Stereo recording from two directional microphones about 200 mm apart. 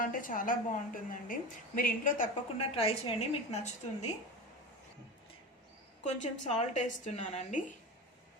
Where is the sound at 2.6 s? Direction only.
30° left (ahead or behind).